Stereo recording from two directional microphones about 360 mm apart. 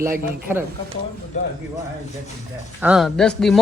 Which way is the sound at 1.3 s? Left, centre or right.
Centre.